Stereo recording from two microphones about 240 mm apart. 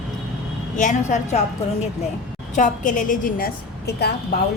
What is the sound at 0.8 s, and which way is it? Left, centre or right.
Speech, left.